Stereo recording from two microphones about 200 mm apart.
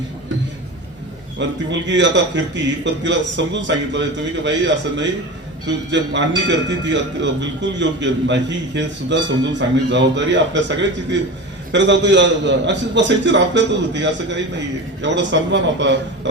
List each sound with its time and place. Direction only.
1.4 s a man's voice: 65° right (ahead or behind)